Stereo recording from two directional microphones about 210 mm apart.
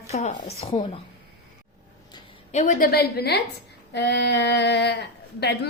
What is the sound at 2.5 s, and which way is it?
A woman's voice, 40° left (ahead or behind).